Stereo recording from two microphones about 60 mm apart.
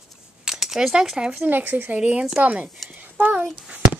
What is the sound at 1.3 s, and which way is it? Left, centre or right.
Speech, right.